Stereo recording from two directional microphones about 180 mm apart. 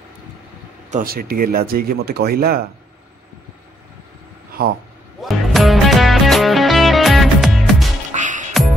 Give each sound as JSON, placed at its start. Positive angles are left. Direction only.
{"t": 0.8, "sound": "speech", "side_deg": -50}
{"t": 4.5, "sound": "a sound", "side_deg": -55}
{"t": 5.2, "sound": "music", "side_deg": 0}
{"t": 8.1, "sound": "music", "side_deg": -45}